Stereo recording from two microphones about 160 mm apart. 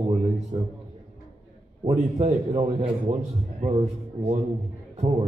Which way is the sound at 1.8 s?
45° right (ahead or behind).